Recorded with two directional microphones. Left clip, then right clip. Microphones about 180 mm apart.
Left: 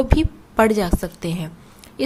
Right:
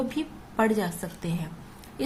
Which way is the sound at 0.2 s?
45° left (ahead or behind).